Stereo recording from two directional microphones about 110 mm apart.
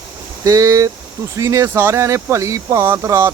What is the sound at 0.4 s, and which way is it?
Speech, 30° right (ahead or behind).